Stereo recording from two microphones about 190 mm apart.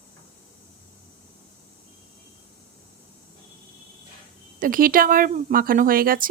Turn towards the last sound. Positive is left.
turn(degrees=-50)  # may be behind; listen again after turning